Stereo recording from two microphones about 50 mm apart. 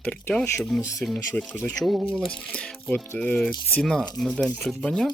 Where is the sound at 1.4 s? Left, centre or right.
Left.